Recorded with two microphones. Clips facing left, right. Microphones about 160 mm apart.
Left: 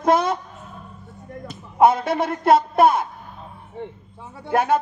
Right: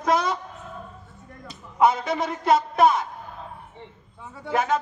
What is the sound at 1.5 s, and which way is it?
A man's voice, 55° left (ahead or behind).